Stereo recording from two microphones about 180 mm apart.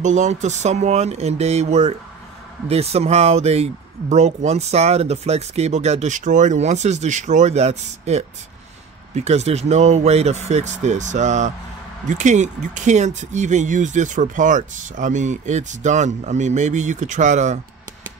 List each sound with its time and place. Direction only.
0.0 s speech: 40° right (ahead or behind)